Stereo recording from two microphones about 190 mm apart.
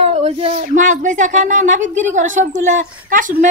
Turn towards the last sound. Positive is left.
turn(degrees=-40)  # may be behind; listen again after turning